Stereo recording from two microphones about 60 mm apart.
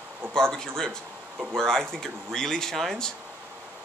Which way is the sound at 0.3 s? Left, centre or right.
Centre.